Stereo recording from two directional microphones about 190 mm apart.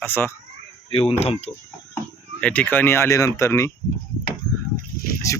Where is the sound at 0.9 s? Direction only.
30° left (ahead or behind).